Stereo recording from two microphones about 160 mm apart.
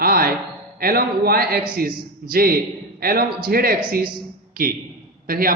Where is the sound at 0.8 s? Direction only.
70° right (ahead or behind).